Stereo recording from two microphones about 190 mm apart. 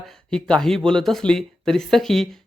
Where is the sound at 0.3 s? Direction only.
5° left (ahead or behind).